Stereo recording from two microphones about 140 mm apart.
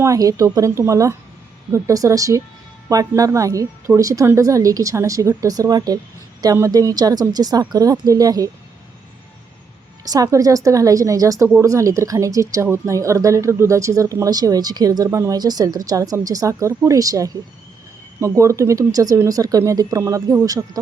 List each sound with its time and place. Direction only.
0.0 s speech: 25° right (ahead or behind)
10.0 s speech: 25° right (ahead or behind)